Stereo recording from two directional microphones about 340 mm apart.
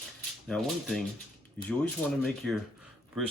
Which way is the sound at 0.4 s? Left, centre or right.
Centre.